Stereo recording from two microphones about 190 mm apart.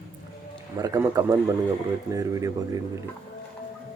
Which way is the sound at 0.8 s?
20° right (ahead or behind).